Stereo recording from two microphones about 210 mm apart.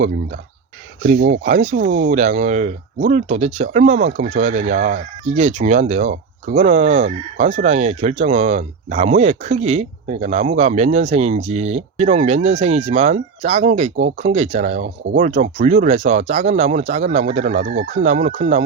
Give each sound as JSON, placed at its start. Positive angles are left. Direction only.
{"t": 1.1, "sound": "speech", "side_deg": -40}